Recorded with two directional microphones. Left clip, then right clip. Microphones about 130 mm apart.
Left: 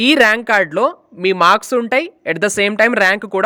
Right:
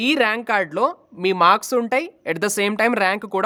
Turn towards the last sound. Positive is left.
turn(degrees=20)  # may be behind; listen again after turning